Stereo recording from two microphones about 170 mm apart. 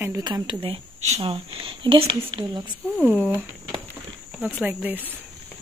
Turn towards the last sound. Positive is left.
turn(degrees=-10)  # may be behind; listen again after turning